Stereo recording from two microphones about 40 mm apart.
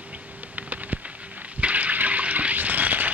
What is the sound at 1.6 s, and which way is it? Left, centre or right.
Toilet flush, right.